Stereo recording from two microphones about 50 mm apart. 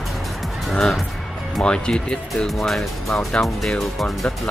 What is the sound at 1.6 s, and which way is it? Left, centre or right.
Speech, centre.